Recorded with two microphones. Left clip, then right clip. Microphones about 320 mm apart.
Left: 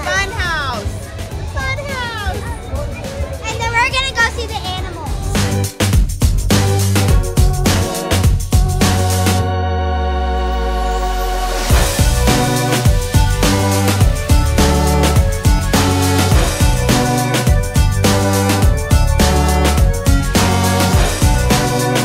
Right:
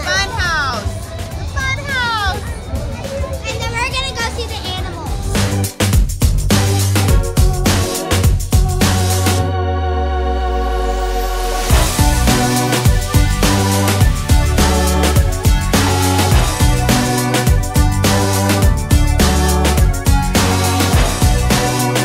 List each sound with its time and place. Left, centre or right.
0.0 s music: centre
3.6 s a sound: left
5.3 s music: centre
12.3 s music: centre